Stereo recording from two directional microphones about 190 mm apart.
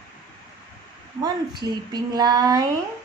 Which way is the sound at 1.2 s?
20° right (ahead or behind).